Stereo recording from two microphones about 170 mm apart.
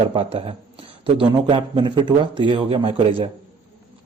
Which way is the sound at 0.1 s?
35° right (ahead or behind).